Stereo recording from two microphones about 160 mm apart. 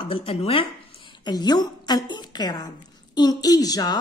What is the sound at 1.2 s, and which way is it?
A woman's voice, 25° left (ahead or behind).